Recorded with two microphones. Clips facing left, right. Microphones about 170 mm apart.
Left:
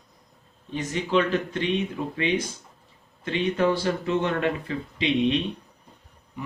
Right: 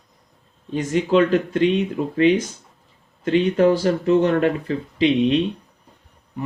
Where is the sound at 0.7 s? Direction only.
45° right (ahead or behind).